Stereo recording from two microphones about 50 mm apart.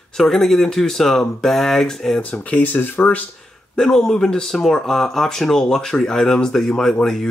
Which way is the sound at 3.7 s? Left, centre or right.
Centre.